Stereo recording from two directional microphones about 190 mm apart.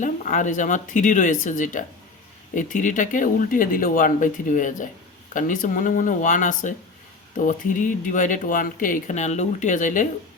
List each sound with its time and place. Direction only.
0.0 s speech: 40° left (ahead or behind)